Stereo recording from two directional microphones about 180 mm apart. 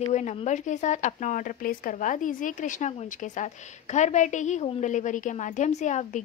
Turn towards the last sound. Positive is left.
turn(degrees=40)  # may be behind; listen again after turning